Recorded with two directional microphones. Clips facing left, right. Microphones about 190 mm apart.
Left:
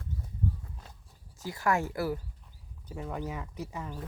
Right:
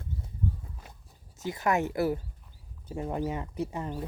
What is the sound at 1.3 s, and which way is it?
Speech, 20° right (ahead or behind).